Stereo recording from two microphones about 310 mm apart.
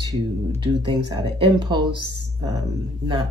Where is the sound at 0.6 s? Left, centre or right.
Centre.